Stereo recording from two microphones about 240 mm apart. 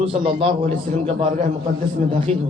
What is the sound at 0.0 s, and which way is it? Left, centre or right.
A man's voice, right.